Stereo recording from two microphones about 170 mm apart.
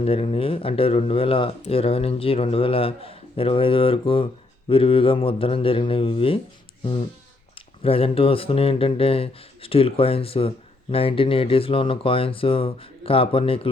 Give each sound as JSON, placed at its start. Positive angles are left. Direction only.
{"t": 0.0, "sound": "speech", "side_deg": 35}
{"t": 7.5, "sound": "speech", "side_deg": 35}